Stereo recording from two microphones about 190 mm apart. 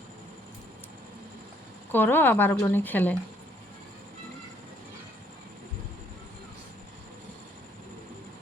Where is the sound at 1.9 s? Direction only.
10° left (ahead or behind).